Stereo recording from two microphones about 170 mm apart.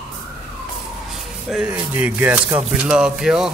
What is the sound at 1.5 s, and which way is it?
Speech, 5° right (ahead or behind).